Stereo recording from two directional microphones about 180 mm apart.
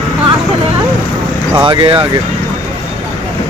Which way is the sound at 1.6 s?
25° right (ahead or behind).